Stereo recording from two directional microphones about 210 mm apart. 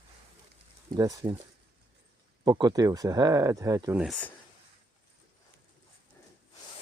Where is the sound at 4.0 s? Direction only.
5° left (ahead or behind).